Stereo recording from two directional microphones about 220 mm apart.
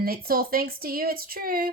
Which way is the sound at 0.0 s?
45° right (ahead or behind).